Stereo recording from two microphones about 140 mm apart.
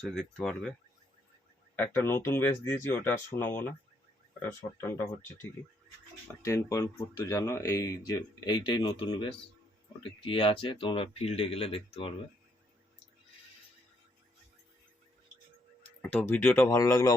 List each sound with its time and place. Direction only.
0.0 s speech: centre (ahead or behind)
1.7 s speech: 10° left (ahead or behind)
6.2 s speech: 20° left (ahead or behind); by 12.1 s 40° left (ahead or behind)
16.0 s speech: 10° left (ahead or behind)
16.6 s speech: 25° left (ahead or behind)